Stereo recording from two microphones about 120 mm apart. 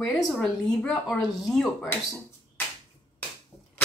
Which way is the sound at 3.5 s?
25° left (ahead or behind).